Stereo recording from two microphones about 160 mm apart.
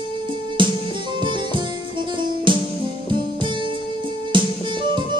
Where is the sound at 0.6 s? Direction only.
30° right (ahead or behind).